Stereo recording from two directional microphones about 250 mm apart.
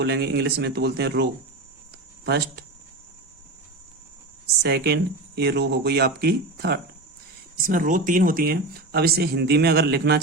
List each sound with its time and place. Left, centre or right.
0.0 s speech: right
4.6 s speech: right